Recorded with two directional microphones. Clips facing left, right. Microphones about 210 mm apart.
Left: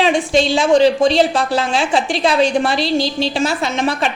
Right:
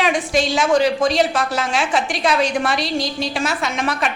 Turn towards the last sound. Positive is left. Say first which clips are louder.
# left 4 dB
turn(degrees=30)  # may be behind; listen again after turning